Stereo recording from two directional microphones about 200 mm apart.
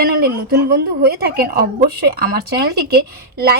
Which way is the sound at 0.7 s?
50° right (ahead or behind).